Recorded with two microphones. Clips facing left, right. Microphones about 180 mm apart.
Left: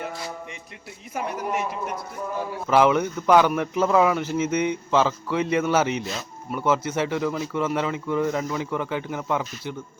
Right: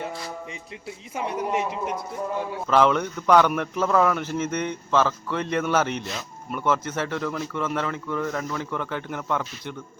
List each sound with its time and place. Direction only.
1.1 s speech: 30° right (ahead or behind)
2.6 s speech: 10° left (ahead or behind)